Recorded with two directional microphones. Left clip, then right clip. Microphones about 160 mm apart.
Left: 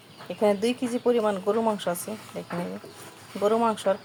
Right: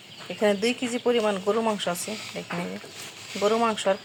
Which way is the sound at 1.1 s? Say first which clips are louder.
Right 1 dB; 10° left (ahead or behind).